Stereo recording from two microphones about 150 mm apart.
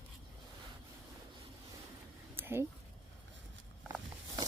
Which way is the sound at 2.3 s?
15° right (ahead or behind).